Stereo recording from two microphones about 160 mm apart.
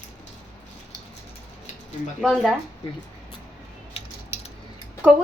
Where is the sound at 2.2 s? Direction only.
Centre (ahead or behind).